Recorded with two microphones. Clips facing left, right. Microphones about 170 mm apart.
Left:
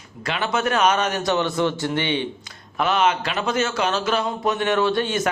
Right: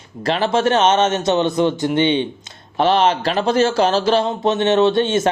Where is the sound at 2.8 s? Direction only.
30° right (ahead or behind).